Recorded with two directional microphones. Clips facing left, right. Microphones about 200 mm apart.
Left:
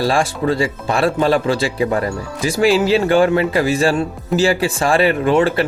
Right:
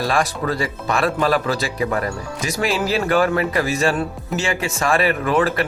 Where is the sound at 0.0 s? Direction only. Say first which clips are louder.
Left 4 dB; 30° left (ahead or behind).